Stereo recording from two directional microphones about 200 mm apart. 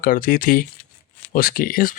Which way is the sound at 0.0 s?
45° left (ahead or behind).